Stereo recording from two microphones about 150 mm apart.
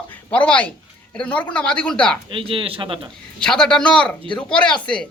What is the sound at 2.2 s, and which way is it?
Speech, 35° right (ahead or behind).